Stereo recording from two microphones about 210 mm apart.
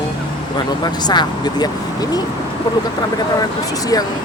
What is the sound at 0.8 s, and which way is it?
Speech, 20° left (ahead or behind).